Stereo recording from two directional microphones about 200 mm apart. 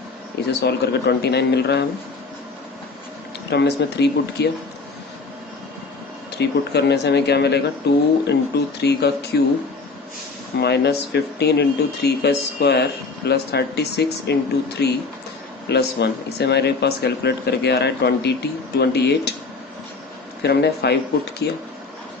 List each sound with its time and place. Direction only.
0.6 s speech: 55° left (ahead or behind)
3.5 s speech: 60° left (ahead or behind)
6.4 s speech: 55° left (ahead or behind)
10.6 s speech: 55° left (ahead or behind)
20.4 s speech: 55° left (ahead or behind)